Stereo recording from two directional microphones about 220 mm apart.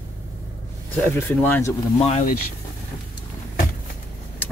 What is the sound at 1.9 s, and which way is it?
Speech, 30° left (ahead or behind).